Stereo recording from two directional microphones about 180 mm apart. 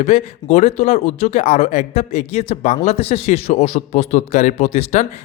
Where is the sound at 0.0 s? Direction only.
40° left (ahead or behind).